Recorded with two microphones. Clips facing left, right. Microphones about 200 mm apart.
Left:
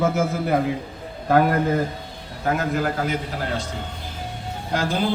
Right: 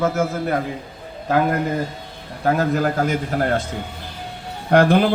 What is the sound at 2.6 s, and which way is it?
A man's voice, 40° right (ahead or behind).